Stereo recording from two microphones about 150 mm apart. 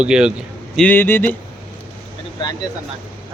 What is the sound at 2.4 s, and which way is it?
Speech, 25° left (ahead or behind).